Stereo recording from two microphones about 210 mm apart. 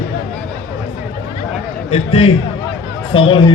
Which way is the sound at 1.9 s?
30° left (ahead or behind).